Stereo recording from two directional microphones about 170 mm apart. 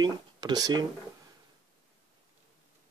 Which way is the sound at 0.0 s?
25° right (ahead or behind).